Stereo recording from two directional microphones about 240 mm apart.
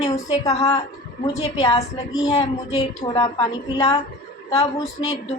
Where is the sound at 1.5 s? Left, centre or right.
Left.